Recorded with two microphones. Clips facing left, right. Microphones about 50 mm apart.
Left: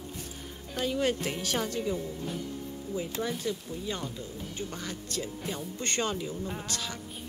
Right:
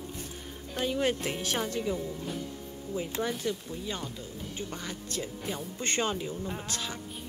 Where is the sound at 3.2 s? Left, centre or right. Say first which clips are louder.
Right 1 dB; centre.